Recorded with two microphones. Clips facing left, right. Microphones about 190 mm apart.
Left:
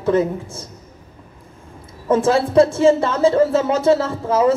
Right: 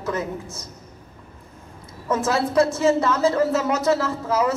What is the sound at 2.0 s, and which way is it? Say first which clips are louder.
A woman's voice: left 6 dB; 30° left (ahead or behind).